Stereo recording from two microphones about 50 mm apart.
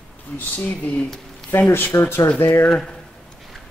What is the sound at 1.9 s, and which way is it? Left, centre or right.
Speech, left.